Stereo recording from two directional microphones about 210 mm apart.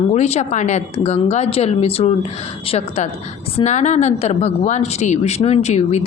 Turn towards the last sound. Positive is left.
turn(degrees=30)  # may be behind; listen again after turning